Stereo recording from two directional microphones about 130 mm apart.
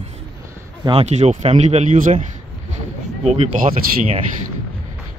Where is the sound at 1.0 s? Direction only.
60° right (ahead or behind); by 2.1 s 80° right.